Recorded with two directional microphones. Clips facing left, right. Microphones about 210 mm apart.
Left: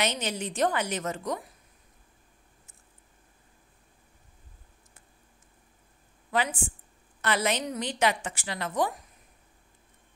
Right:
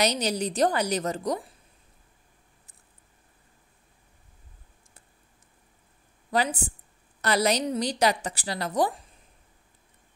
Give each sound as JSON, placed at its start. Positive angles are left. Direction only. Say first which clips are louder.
{"t": 0.0, "sound": "a woman's voice", "louder": "right 5 dB", "side_deg": -35}
{"t": 6.3, "sound": "a woman's voice", "louder": "right 3 dB", "side_deg": -40}